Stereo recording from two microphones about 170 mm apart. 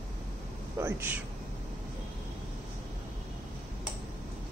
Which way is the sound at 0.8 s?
15° right (ahead or behind).